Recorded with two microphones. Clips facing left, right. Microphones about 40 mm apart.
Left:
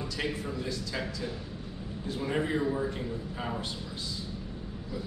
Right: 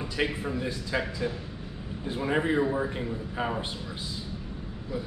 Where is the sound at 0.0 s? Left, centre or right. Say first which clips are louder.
Right 4 dB; right.